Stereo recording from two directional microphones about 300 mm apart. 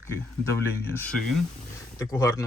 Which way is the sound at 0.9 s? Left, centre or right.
Centre.